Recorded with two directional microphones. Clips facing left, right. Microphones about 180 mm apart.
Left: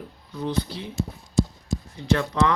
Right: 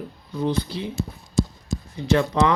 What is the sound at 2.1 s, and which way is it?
Speech, 15° right (ahead or behind).